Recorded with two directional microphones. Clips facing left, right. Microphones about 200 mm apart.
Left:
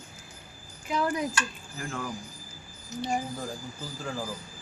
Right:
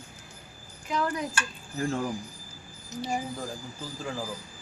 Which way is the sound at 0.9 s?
10° left (ahead or behind).